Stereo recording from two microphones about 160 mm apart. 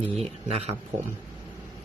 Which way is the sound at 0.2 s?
40° right (ahead or behind).